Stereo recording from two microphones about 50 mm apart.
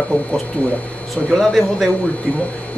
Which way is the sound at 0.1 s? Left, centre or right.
Left.